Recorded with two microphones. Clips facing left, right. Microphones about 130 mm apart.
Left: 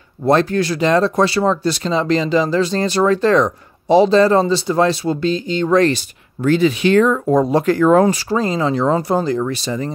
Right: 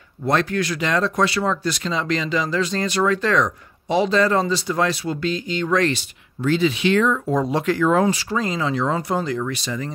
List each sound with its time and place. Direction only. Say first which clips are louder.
0.2 s speech: left 6 dB; 35° left (ahead or behind)
6.4 s speech: left 5 dB; 50° left (ahead or behind); by 9.9 s 35° left (ahead or behind)